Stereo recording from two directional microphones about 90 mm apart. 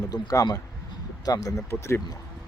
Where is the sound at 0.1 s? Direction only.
45° left (ahead or behind).